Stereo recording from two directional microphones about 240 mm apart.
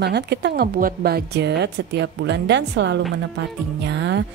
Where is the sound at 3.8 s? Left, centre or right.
Right.